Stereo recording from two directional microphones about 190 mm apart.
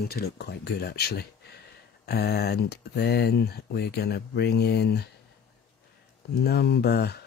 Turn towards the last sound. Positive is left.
turn(degrees=60)  # may be behind; listen again after turning